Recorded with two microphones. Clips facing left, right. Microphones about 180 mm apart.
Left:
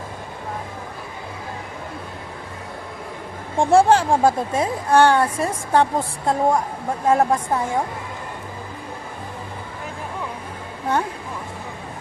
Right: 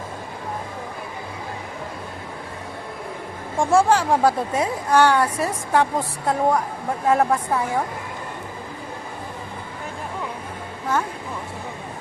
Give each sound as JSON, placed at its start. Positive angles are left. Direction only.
{"t": 3.6, "sound": "speech", "side_deg": 30}